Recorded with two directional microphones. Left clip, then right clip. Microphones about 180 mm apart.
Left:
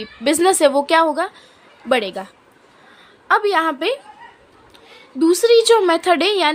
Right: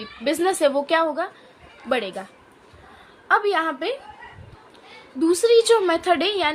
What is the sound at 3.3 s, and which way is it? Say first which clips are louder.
Speech: left 4 dB; 35° left (ahead or behind).